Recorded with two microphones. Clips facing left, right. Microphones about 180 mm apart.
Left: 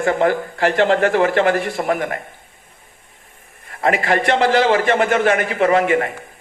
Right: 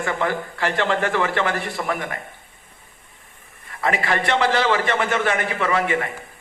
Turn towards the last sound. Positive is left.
turn(degrees=45)  # may be behind; listen again after turning